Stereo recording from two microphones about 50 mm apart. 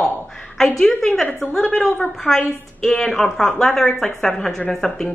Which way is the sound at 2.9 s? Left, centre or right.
Centre.